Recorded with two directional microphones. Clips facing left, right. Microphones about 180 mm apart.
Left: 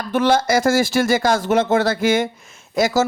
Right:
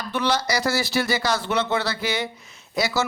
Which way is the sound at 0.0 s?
50° left (ahead or behind).